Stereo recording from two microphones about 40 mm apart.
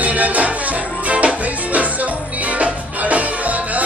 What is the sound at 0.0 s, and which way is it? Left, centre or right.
Music, right.